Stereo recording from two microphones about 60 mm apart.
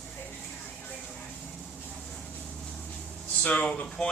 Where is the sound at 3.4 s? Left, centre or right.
Centre.